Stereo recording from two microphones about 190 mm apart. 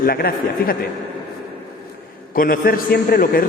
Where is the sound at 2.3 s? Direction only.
50° left (ahead or behind).